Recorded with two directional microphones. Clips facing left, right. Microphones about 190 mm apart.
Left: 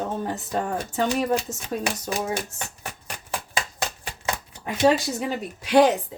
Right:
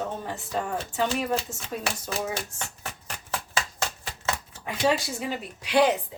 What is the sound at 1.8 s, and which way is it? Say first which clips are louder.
Speech: left 2 dB; 15° left (ahead or behind).